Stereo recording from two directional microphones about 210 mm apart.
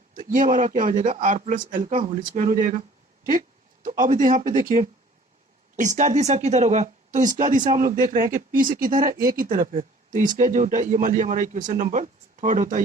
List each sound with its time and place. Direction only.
0.1 s speech: 40° right (ahead or behind)
3.8 s speech: 40° right (ahead or behind)